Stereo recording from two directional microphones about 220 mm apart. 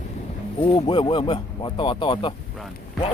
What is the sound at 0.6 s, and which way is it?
Speech, 25° left (ahead or behind).